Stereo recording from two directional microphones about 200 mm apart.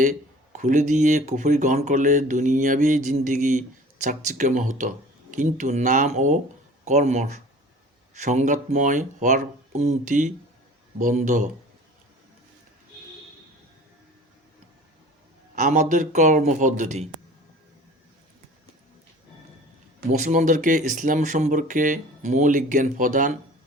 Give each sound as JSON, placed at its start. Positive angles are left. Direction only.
{"t": 0.0, "sound": "speech", "side_deg": -40}
{"t": 15.5, "sound": "speech", "side_deg": -40}
{"t": 20.1, "sound": "speech", "side_deg": -35}